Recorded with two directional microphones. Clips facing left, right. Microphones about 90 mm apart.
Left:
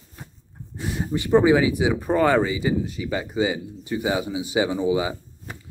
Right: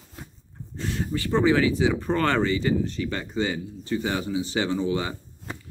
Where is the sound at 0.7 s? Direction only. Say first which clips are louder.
Left 2 dB; 15° left (ahead or behind).